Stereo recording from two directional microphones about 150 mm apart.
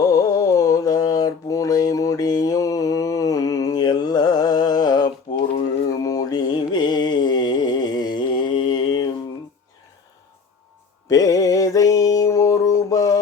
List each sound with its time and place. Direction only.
0.0 s mantra: 25° left (ahead or behind)
11.1 s mantra: 25° left (ahead or behind)